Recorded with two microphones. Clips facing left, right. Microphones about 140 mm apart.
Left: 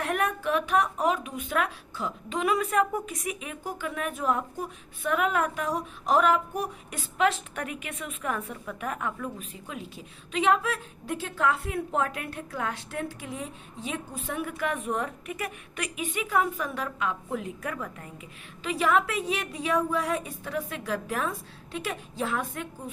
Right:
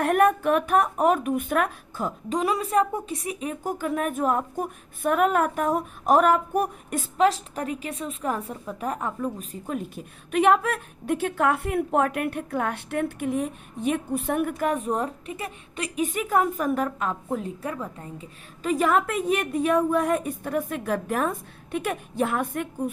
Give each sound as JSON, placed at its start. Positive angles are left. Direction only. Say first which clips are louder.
{"t": 0.0, "sound": "a woman's voice", "louder": "right 8 dB", "side_deg": -50}
{"t": 7.2, "sound": "a woman's voice", "louder": "right 4 dB", "side_deg": -35}
{"t": 16.0, "sound": "a woman's voice", "louder": "right 3 dB", "side_deg": -45}
{"t": 18.6, "sound": "a woman's voice", "louder": "right 3 dB", "side_deg": -45}